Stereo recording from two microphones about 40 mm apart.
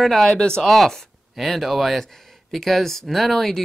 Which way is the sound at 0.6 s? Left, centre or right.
Centre.